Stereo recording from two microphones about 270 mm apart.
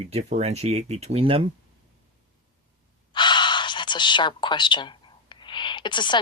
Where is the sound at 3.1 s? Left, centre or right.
Centre.